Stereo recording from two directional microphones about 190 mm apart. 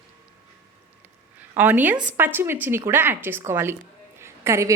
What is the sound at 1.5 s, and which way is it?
A woman's voice, 10° right (ahead or behind).